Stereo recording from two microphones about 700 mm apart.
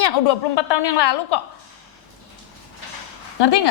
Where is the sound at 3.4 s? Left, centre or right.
Left.